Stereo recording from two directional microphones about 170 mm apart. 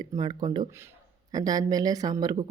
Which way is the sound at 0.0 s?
25° right (ahead or behind).